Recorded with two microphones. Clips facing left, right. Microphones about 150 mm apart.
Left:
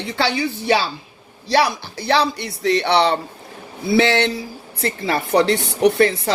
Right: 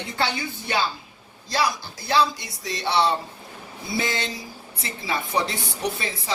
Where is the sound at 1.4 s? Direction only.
65° left (ahead or behind).